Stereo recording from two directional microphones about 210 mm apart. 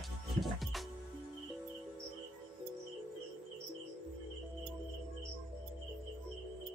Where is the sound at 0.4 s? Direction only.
Centre (ahead or behind).